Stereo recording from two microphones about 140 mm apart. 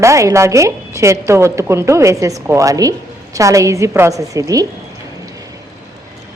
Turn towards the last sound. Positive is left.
turn(degrees=-25)  # may be behind; listen again after turning